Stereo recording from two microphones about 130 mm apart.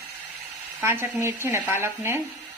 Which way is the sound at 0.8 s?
15° right (ahead or behind).